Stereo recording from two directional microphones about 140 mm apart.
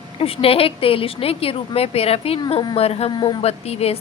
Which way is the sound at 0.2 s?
45° left (ahead or behind).